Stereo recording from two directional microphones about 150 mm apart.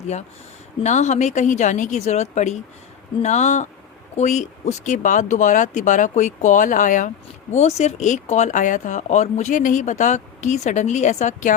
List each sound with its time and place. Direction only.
0.8 s speech: 50° left (ahead or behind)